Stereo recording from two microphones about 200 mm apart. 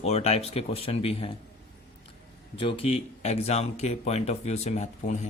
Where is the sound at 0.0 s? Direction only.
35° left (ahead or behind).